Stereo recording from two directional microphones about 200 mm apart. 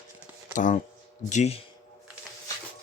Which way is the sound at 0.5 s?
40° left (ahead or behind).